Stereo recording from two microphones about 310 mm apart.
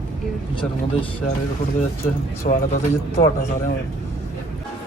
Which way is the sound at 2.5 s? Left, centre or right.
Left.